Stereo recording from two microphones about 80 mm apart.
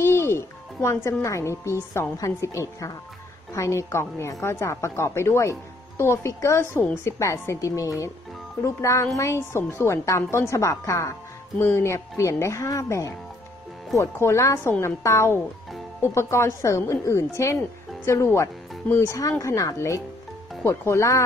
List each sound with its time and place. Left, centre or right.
0.0 s music: left
1.2 s a woman's voice: left
14.1 s a woman's voice: left